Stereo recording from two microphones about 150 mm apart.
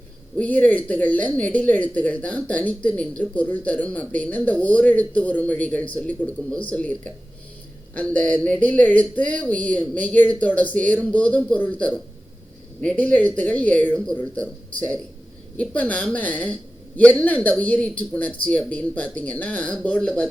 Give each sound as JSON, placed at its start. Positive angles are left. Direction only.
{"t": 0.3, "sound": "speech", "side_deg": 10}